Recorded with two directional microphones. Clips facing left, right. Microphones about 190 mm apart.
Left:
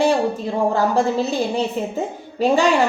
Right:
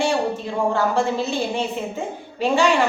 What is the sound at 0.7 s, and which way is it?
Speech, 35° left (ahead or behind).